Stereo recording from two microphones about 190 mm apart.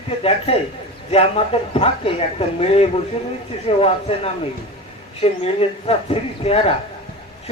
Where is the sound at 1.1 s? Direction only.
30° left (ahead or behind).